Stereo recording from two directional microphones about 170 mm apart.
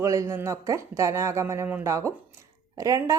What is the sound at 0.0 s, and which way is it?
Speech, 20° right (ahead or behind).